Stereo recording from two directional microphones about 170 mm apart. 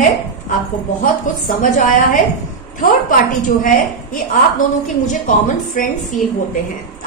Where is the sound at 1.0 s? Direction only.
55° left (ahead or behind).